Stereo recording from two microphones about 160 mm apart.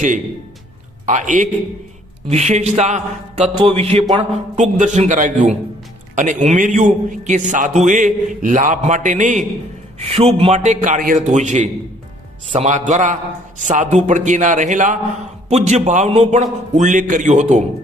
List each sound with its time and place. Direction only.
1.0 s a man's voice: 50° right (ahead or behind); by 4.0 s 35° right (ahead or behind)
4.2 s a man's voice: 45° right (ahead or behind)